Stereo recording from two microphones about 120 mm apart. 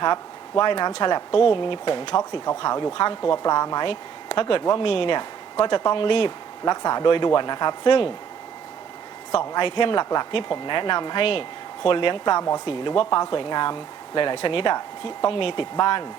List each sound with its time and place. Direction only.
0.6 s speech: 40° left (ahead or behind)
3.8 s speech: 50° left (ahead or behind)
9.3 s speech: 35° left (ahead or behind)
15.7 s speech: 40° left (ahead or behind)